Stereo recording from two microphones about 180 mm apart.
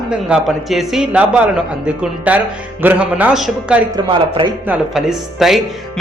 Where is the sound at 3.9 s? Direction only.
30° right (ahead or behind).